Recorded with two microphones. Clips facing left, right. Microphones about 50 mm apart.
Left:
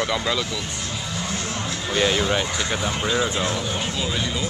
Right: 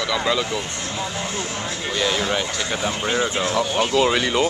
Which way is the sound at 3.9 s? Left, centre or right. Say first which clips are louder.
Right 8 dB; right.